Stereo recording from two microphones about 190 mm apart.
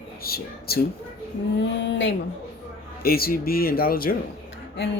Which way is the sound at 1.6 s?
70° left (ahead or behind).